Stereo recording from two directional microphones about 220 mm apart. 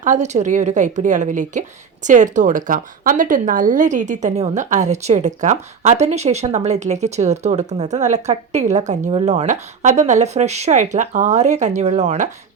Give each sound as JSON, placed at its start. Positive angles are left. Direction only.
{"t": 0.0, "sound": "speech", "side_deg": -35}